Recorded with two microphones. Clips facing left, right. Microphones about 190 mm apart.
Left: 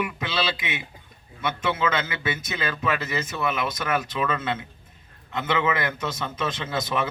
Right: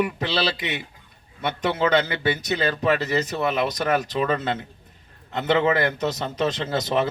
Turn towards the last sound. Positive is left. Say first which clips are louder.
# right 4 dB
turn(degrees=-35)  # may be behind; listen again after turning